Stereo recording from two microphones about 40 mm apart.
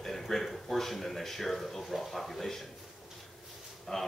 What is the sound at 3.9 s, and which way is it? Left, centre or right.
Speech, centre.